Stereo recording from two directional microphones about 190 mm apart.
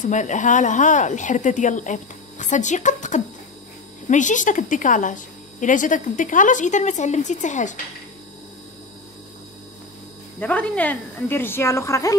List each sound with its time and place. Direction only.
0.0 s a woman's voice: 40° left (ahead or behind)
10.4 s a woman's voice: 5° left (ahead or behind)